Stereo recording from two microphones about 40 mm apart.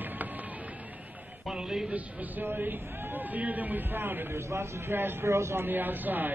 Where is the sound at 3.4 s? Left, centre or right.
Right.